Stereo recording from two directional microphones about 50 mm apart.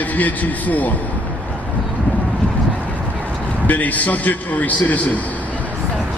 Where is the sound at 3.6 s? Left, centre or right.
Left.